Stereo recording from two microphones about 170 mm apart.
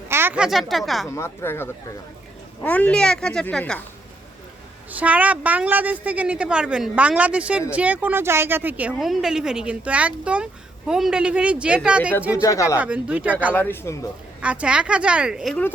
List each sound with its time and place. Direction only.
0.1 s speech: 15° right (ahead or behind)
1.0 s speech: 15° left (ahead or behind)
4.9 s speech: 10° right (ahead or behind)
12.3 s speech: 20° left (ahead or behind)
12.7 s speech: 5° right (ahead or behind)
13.5 s speech: 10° left (ahead or behind)
14.4 s speech: 5° right (ahead or behind)